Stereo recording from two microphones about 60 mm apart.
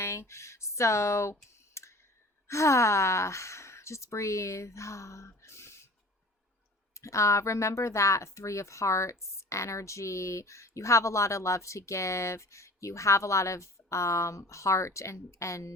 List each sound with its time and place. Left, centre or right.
0.0 s speech: left
1.7 s clicking: left
2.5 s speech: left
5.4 s a sound: left
6.9 s speech: left